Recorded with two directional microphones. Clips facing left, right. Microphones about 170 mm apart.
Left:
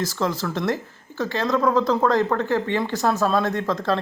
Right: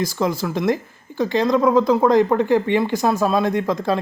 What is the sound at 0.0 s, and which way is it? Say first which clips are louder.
Speech: right 3 dB; 10° right (ahead or behind).